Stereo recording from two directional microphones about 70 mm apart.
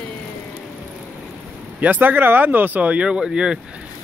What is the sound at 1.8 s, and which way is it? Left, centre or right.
Speech, right.